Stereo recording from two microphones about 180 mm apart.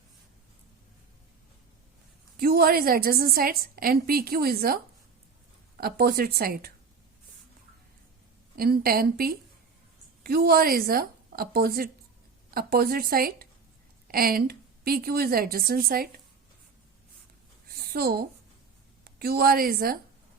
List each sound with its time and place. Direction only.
2.4 s a woman's voice: 55° right (ahead or behind)
8.5 s a woman's voice: 55° right (ahead or behind)
17.7 s a woman's voice: 60° right (ahead or behind)